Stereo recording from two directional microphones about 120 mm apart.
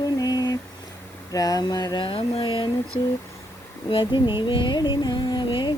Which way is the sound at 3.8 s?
45° left (ahead or behind).